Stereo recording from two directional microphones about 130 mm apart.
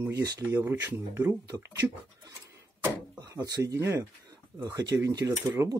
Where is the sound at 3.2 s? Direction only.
25° right (ahead or behind).